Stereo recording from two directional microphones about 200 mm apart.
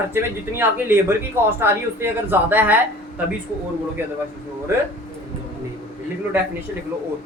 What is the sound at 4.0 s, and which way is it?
Speech, 10° right (ahead or behind).